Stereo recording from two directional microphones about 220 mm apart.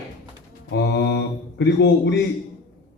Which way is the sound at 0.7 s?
50° left (ahead or behind).